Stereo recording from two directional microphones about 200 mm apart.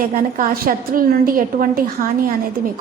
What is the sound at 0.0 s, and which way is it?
A woman's voice, 45° right (ahead or behind).